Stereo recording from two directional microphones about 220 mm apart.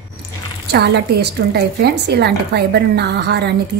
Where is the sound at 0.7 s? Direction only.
50° right (ahead or behind).